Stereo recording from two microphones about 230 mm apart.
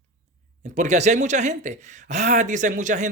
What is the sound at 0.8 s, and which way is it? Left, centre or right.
Speech, right.